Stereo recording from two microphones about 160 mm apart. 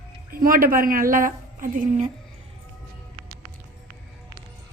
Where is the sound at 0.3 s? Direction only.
60° right (ahead or behind).